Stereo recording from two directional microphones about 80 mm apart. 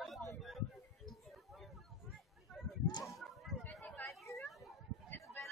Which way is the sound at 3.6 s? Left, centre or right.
Centre.